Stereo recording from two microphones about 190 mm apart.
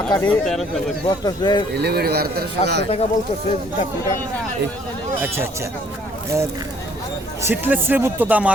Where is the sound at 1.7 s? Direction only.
60° right (ahead or behind).